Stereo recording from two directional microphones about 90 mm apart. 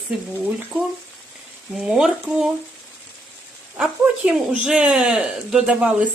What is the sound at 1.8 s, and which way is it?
Speech, 5° right (ahead or behind).